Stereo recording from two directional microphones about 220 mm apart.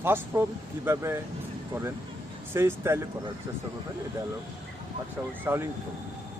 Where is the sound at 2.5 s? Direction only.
10° right (ahead or behind).